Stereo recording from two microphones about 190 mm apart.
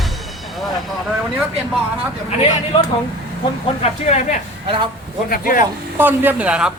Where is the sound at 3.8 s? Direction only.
35° left (ahead or behind).